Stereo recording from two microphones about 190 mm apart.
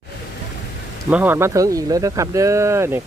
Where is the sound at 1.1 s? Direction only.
10° right (ahead or behind).